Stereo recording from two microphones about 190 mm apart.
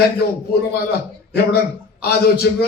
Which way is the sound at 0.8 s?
55° left (ahead or behind).